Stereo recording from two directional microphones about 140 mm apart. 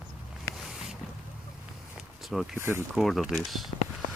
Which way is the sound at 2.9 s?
Centre (ahead or behind).